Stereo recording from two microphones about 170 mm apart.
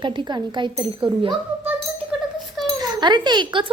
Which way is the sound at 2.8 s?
25° right (ahead or behind).